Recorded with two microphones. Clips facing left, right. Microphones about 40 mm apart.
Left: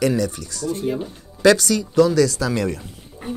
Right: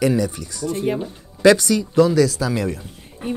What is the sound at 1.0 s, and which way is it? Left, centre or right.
Speech, centre.